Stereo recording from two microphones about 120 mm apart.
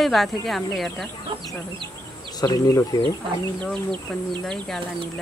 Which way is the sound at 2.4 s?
30° left (ahead or behind).